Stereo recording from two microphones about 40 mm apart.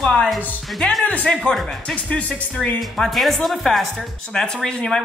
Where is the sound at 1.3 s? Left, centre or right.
Centre.